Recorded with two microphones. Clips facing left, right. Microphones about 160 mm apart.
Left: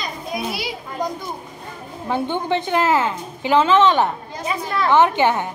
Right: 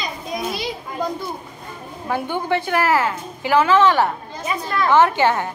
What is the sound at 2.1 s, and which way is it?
A woman's voice, 20° left (ahead or behind).